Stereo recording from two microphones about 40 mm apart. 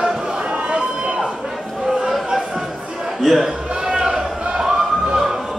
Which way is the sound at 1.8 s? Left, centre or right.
Centre.